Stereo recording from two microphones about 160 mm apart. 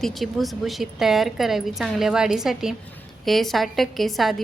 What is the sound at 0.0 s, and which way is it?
A woman's voice, centre (ahead or behind).